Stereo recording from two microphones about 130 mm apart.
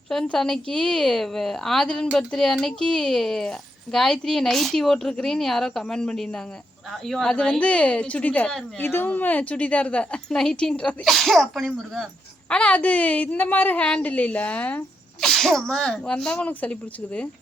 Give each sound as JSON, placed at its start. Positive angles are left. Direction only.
{"t": 0.1, "sound": "a woman's voice", "side_deg": 5}